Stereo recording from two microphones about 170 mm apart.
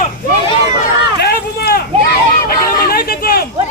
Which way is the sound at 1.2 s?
65° left (ahead or behind).